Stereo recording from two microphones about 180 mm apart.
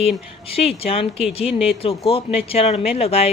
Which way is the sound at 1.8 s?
30° left (ahead or behind).